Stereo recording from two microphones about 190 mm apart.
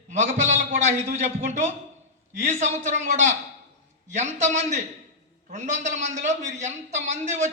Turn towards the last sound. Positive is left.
turn(degrees=-40)  # may be behind; listen again after turning